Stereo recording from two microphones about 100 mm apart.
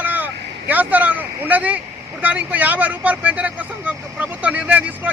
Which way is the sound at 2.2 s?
15° right (ahead or behind).